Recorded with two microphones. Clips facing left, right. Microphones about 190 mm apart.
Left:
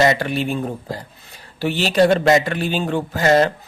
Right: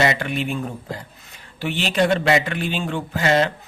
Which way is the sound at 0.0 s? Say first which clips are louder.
Left 4 dB; 40° left (ahead or behind).